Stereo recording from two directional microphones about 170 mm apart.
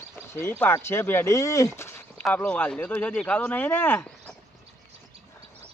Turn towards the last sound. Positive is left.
turn(degrees=10)  # may be behind; listen again after turning